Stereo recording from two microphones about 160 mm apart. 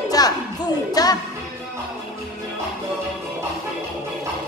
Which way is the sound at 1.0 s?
25° left (ahead or behind).